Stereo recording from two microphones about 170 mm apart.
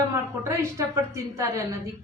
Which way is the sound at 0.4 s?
15° right (ahead or behind).